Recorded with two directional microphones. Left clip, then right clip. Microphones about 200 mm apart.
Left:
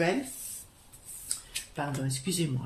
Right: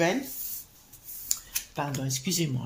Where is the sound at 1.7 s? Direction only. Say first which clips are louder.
Right 2 dB; 35° right (ahead or behind).